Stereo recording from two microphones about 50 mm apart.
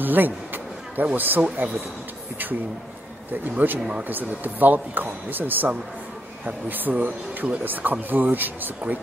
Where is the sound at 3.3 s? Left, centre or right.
Right.